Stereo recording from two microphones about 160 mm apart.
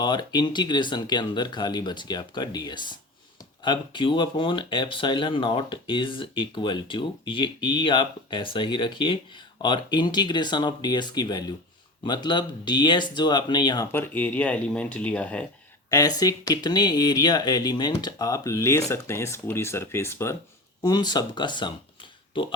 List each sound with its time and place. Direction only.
0.0 s speech: 25° left (ahead or behind)
13.9 s speech: 10° left (ahead or behind)
15.9 s speech: 25° left (ahead or behind)